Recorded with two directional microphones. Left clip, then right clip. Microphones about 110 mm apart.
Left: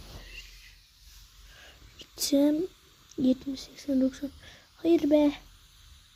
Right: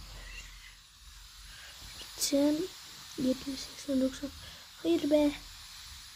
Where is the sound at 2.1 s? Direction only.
35° left (ahead or behind).